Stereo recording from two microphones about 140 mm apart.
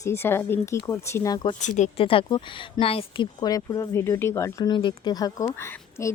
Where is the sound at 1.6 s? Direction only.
60° left (ahead or behind).